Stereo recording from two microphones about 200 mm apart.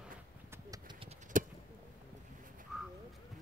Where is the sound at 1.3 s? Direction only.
40° right (ahead or behind).